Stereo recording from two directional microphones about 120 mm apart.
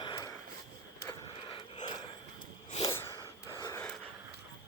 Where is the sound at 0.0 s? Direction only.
40° left (ahead or behind).